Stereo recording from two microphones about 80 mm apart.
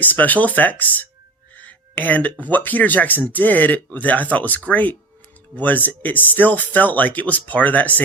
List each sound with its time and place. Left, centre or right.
0.0 s speech: left
1.5 s a sound: left
2.5 s speech: left